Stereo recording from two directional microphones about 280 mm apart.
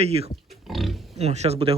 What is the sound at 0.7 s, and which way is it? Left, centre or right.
Speech, centre.